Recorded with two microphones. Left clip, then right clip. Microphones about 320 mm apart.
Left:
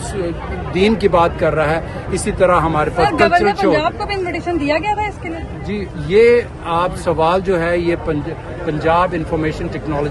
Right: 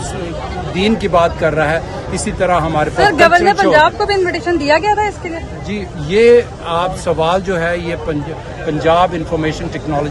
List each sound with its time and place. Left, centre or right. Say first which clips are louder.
0.8 s speech: even; centre
3.2 s speech: right 3 dB; right
5.7 s speech: left 1 dB; centre